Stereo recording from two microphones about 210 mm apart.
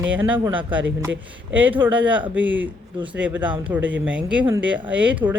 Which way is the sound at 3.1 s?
5° right (ahead or behind).